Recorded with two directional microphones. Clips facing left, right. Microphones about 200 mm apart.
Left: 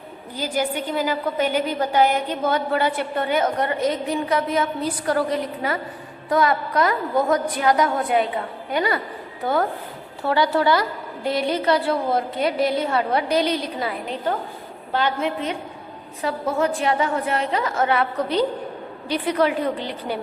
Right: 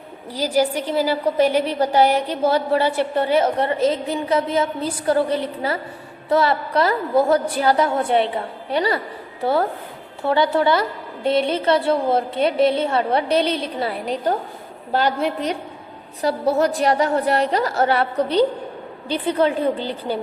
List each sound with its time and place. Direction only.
0.3 s a woman's voice: 35° right (ahead or behind)